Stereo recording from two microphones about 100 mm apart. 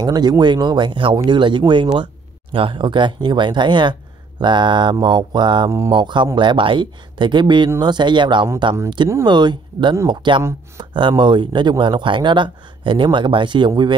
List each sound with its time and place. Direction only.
0.0 s speech: 45° right (ahead or behind)